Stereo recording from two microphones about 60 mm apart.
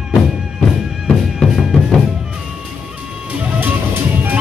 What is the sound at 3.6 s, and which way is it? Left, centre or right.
Music, right.